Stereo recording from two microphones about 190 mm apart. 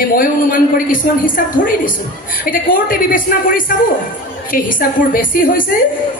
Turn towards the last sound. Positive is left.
turn(degrees=45)  # may be behind; listen again after turning